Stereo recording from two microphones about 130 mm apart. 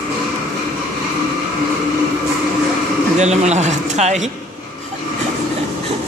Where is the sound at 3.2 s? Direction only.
60° right (ahead or behind).